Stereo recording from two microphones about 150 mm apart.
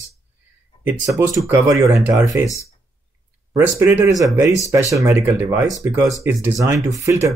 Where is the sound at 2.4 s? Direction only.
20° left (ahead or behind).